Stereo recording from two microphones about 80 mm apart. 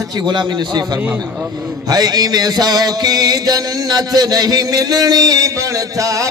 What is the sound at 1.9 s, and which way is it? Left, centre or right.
Music, right.